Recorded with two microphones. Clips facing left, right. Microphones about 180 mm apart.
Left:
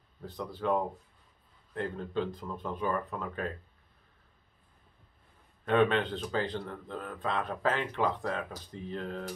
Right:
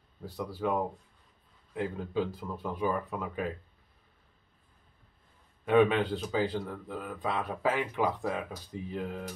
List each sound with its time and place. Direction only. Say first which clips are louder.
0.2 s speech: right 2 dB; 10° right (ahead or behind)
5.7 s speech: right 2 dB; 15° right (ahead or behind)